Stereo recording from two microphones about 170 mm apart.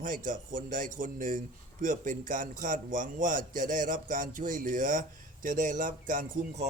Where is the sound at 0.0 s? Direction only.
50° right (ahead or behind).